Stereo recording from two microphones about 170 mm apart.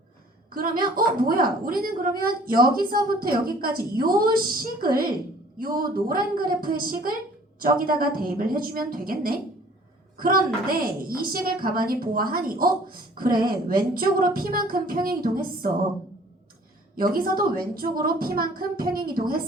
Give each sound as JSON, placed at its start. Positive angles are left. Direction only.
{"t": 0.5, "sound": "a woman's voice", "side_deg": -60}
{"t": 17.0, "sound": "a woman's voice", "side_deg": -60}